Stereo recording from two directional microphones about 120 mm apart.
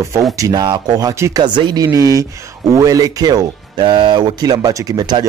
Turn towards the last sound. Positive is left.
turn(degrees=-35)  # may be behind; listen again after turning